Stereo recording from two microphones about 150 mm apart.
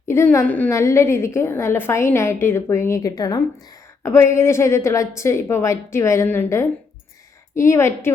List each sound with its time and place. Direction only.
0.1 s a woman's voice: 15° left (ahead or behind)